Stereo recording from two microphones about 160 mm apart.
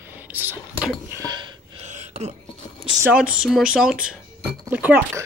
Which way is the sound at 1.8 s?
45° right (ahead or behind).